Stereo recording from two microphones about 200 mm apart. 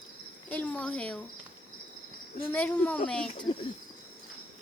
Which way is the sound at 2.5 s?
10° left (ahead or behind).